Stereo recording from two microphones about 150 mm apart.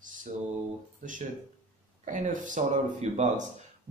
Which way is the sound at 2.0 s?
60° right (ahead or behind).